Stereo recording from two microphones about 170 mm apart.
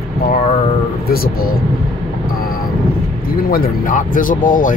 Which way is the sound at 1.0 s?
60° left (ahead or behind).